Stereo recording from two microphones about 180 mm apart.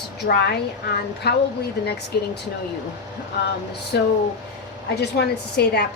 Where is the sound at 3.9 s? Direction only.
70° left (ahead or behind).